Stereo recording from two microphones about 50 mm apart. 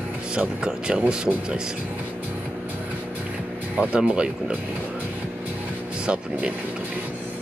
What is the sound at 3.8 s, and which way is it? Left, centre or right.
Speech, right.